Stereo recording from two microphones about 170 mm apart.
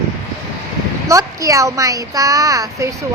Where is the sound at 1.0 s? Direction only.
20° right (ahead or behind).